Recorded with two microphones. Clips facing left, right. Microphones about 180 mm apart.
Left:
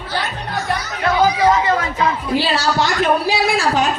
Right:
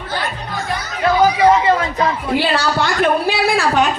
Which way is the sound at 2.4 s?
55° right (ahead or behind).